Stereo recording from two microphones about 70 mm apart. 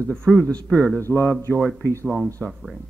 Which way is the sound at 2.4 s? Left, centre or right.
Centre.